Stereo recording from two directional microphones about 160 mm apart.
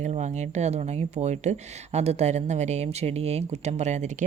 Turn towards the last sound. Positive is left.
turn(degrees=-45)  # may be behind; listen again after turning